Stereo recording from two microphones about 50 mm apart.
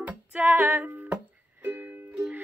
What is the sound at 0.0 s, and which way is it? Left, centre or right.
Music, right.